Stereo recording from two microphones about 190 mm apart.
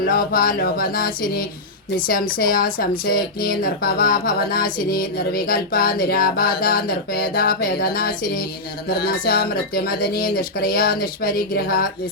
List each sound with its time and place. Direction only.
0.0 s speech: 50° left (ahead or behind)